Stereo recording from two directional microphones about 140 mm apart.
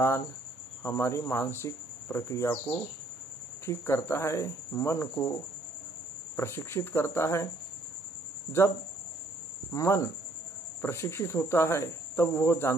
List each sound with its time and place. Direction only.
0.8 s cricket: 20° left (ahead or behind)
6.3 s cricket: 20° left (ahead or behind)
8.5 s cricket: 20° left (ahead or behind)